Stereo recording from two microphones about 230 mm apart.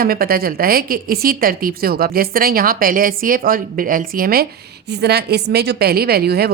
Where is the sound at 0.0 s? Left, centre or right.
Right.